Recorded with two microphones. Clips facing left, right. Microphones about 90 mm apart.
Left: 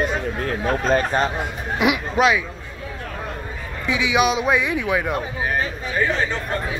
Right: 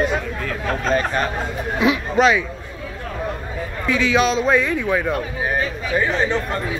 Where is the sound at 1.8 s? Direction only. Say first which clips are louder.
Right 2 dB; 10° left (ahead or behind).